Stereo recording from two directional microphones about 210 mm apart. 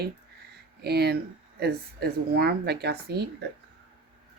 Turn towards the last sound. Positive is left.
turn(degrees=-50)  # may be behind; listen again after turning